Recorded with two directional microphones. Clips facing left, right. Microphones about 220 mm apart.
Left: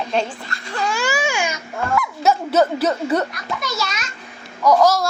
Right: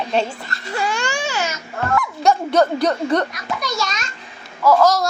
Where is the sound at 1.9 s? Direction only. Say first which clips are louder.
Right 1 dB; 5° left (ahead or behind).